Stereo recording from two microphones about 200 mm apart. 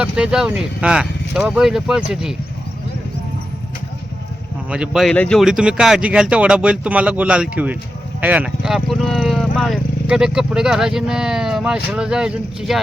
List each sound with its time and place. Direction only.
0.0 s speech: 5° right (ahead or behind)
4.7 s speech: 5° right (ahead or behind)